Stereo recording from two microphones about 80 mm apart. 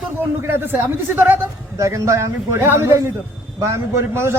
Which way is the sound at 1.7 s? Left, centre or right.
Right.